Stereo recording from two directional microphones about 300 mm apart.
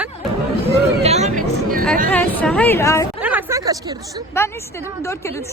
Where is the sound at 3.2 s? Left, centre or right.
Centre.